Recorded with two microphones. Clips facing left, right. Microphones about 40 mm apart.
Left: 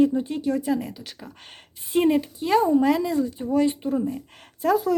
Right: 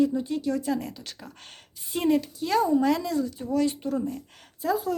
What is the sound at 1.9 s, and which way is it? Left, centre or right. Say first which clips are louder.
Speech: left 4 dB; left.